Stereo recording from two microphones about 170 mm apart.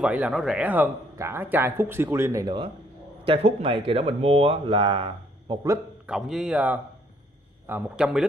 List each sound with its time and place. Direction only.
0.0 s speech: 5° right (ahead or behind)
2.4 s speech: 30° right (ahead or behind)
6.0 s speech: 5° right (ahead or behind)